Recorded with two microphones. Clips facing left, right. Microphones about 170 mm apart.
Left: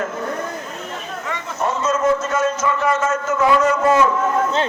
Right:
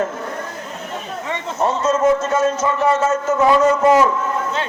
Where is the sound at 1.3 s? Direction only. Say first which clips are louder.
Right 3 dB; 30° right (ahead or behind).